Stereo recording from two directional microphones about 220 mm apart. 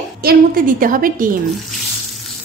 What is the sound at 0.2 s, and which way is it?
Sizzle, 40° right (ahead or behind).